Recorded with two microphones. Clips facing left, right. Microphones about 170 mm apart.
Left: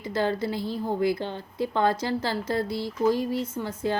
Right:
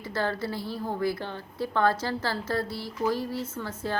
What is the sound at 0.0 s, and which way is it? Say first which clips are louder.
A woman's voice: left 4 dB; 15° left (ahead or behind).